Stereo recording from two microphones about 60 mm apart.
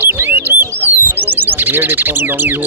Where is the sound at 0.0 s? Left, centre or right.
Right.